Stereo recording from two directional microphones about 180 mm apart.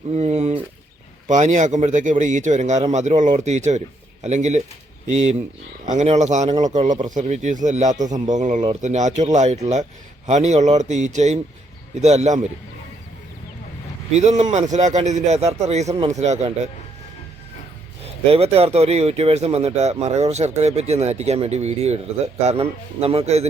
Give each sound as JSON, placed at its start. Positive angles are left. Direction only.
{"t": 0.1, "sound": "a sound", "side_deg": -40}
{"t": 1.3, "sound": "speech", "side_deg": -40}
{"t": 14.1, "sound": "speech", "side_deg": -40}
{"t": 18.0, "sound": "speech", "side_deg": -35}